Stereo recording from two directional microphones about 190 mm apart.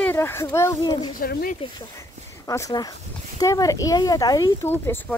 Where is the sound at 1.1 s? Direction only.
50° left (ahead or behind).